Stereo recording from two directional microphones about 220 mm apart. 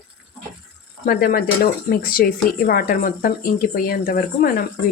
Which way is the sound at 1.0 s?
40° left (ahead or behind).